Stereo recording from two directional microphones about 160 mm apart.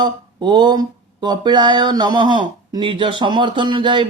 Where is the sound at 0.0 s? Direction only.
30° right (ahead or behind).